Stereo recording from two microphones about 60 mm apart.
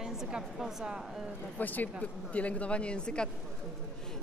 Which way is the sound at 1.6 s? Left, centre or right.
Left.